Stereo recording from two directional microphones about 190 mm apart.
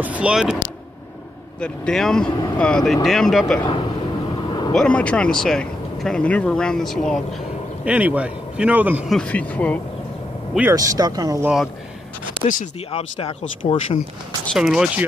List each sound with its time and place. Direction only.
0.0 s speech: 5° right (ahead or behind)
1.6 s speech: 5° left (ahead or behind)
4.5 s vehicle: 25° left (ahead or behind)
4.7 s speech: 5° left (ahead or behind)
10.7 s speech: 15° right (ahead or behind)
11.4 s speech: centre (ahead or behind)
12.4 s speech: 35° left (ahead or behind)
14.4 s speech: centre (ahead or behind)